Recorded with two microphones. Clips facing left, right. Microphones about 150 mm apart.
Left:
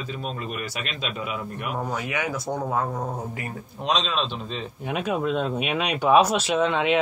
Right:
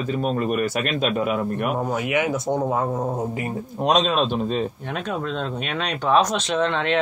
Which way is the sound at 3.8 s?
50° right (ahead or behind).